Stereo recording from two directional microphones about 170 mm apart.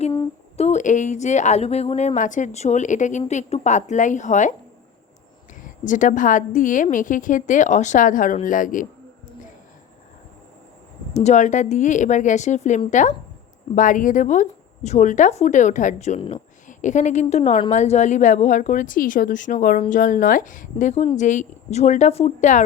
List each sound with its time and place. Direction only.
0.5 s speech: 40° left (ahead or behind)
5.6 s speech: 50° left (ahead or behind)
11.1 s speech: 40° left (ahead or behind)